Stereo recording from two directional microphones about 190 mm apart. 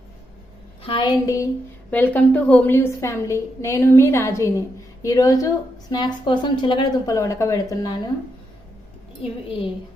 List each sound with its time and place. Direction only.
0.8 s a woman's voice: 25° left (ahead or behind)
1.9 s a woman's voice: 10° left (ahead or behind)
9.2 s a woman's voice: 30° left (ahead or behind)